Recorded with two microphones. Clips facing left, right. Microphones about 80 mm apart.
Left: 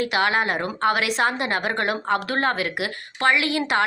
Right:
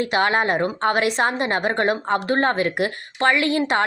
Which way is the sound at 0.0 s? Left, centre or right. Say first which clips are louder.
Right 2 dB; right.